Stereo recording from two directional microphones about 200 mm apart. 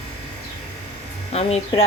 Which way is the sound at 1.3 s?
30° left (ahead or behind).